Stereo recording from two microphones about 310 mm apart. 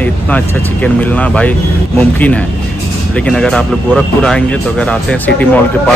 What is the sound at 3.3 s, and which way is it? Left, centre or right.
Speech, centre.